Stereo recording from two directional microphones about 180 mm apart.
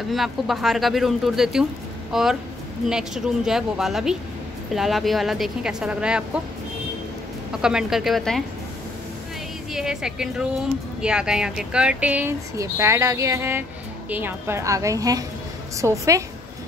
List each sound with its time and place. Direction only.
0.1 s speech: centre (ahead or behind)
7.6 s speech: 5° right (ahead or behind)
9.7 s speech: 5° right (ahead or behind)